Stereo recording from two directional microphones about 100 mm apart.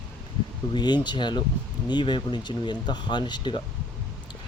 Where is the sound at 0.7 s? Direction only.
45° left (ahead or behind).